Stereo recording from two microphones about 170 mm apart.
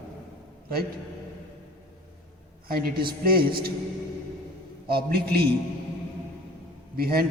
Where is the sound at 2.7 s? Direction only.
65° right (ahead or behind).